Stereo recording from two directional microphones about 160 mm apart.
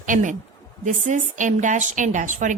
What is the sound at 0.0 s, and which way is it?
A woman's voice, 55° right (ahead or behind).